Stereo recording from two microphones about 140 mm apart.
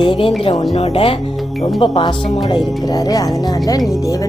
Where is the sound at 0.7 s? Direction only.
50° left (ahead or behind).